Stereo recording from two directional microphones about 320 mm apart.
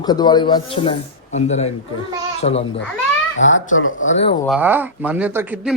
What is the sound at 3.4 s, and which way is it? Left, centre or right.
Speech, left.